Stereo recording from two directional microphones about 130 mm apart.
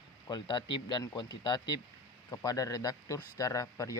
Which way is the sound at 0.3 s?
35° left (ahead or behind).